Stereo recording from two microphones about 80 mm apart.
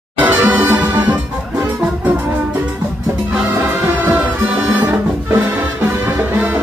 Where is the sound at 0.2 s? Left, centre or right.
Right.